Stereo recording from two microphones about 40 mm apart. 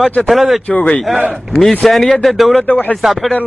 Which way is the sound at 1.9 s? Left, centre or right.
Centre.